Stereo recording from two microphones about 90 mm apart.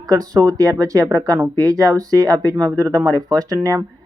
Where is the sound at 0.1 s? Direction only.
45° right (ahead or behind).